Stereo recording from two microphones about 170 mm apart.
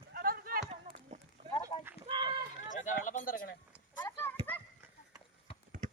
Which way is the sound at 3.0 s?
50° left (ahead or behind).